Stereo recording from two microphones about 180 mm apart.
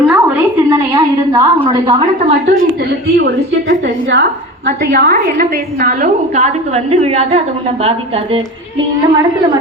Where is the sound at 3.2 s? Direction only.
80° right.